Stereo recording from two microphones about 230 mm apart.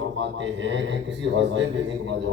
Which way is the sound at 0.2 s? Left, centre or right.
Right.